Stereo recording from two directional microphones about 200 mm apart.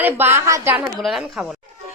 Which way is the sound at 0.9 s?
Centre (ahead or behind).